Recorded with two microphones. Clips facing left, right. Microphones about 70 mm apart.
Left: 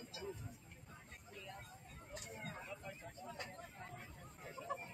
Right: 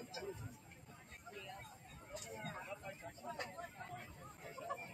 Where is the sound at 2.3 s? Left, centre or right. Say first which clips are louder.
Right 2 dB; right.